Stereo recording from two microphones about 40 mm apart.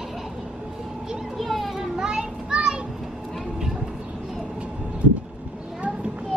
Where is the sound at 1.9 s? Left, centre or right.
Centre.